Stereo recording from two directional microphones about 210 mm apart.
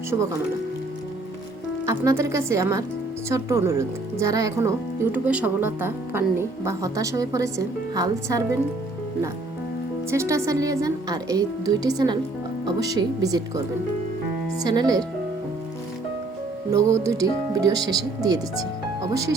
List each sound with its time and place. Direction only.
0.1 s a woman's voice: 15° right (ahead or behind)
1.9 s a woman's voice: 15° right (ahead or behind)
10.1 s a woman's voice: 15° right (ahead or behind)
14.6 s speech: 20° right (ahead or behind)
16.7 s a woman's voice: 15° right (ahead or behind)